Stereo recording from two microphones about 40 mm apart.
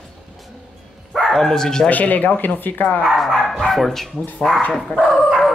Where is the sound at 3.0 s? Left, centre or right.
Centre.